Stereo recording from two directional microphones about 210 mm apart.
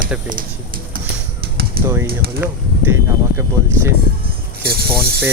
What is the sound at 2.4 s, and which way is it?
Speech, 10° right (ahead or behind).